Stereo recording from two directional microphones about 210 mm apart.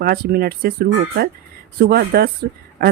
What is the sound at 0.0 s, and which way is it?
A woman's voice, 45° right (ahead or behind).